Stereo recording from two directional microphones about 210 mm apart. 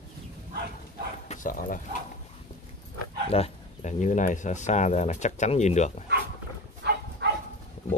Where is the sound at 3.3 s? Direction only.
30° left (ahead or behind).